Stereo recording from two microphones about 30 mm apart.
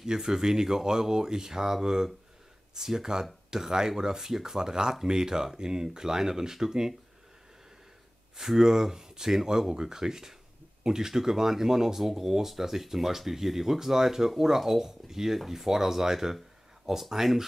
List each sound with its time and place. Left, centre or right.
0.0 s speech: right
8.4 s speech: centre